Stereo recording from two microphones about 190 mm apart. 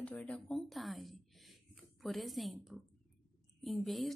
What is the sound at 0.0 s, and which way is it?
Speech, 5° left (ahead or behind).